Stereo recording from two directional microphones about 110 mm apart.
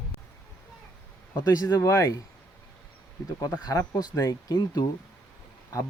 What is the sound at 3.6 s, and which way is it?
Speech, 35° left (ahead or behind).